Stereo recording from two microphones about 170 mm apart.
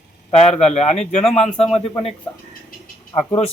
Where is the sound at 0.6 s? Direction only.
40° left (ahead or behind).